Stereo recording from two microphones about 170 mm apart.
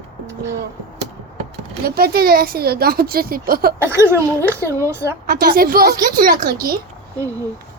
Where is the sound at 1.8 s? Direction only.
65° right (ahead or behind).